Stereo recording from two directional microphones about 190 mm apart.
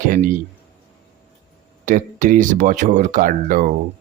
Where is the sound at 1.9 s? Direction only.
45° right (ahead or behind).